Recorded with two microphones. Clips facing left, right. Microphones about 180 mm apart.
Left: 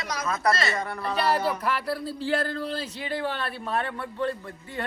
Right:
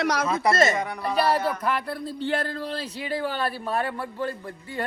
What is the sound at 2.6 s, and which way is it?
Speech, centre (ahead or behind).